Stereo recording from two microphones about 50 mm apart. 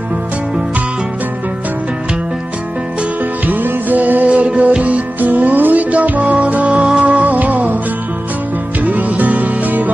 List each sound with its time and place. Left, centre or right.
3.4 s music: right
8.8 s music: right